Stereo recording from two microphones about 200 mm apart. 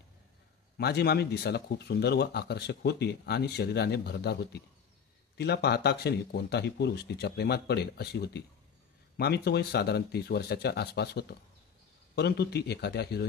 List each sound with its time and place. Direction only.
0.7 s speech: 55° left (ahead or behind)